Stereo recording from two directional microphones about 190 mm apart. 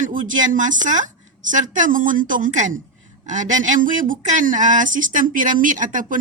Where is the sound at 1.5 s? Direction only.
40° right (ahead or behind).